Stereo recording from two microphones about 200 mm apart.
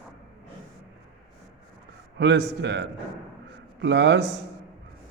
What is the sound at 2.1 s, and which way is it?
A man's voice, 60° right (ahead or behind).